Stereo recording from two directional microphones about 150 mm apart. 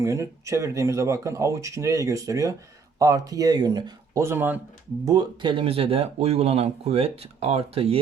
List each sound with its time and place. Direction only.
0.0 s speech: 20° right (ahead or behind)
5.0 s speech: 25° right (ahead or behind)